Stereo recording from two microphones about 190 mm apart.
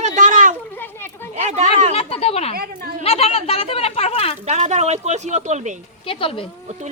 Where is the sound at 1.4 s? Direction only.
40° right (ahead or behind).